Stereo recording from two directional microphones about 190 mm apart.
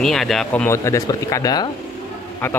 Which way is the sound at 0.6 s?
15° left (ahead or behind).